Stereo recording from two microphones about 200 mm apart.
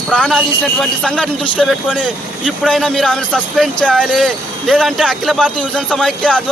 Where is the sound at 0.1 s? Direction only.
Centre (ahead or behind).